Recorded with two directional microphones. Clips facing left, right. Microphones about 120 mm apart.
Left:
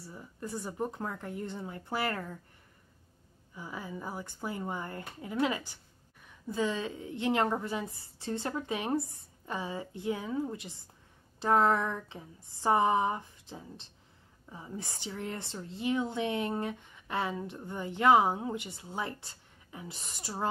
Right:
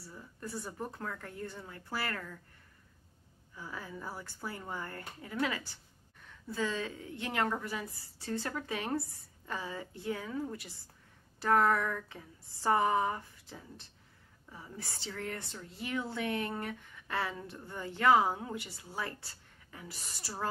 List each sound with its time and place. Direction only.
0.0 s a woman's voice: 20° left (ahead or behind)
3.5 s a woman's voice: 15° left (ahead or behind)